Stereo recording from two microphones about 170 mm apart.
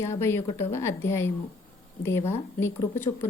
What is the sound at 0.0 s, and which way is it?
Speech, 15° left (ahead or behind).